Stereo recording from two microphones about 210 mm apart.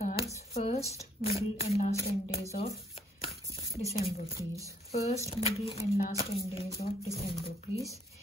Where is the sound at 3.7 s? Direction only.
30° left (ahead or behind).